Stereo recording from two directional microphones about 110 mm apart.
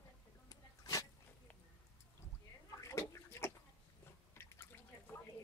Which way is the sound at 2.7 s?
25° left (ahead or behind).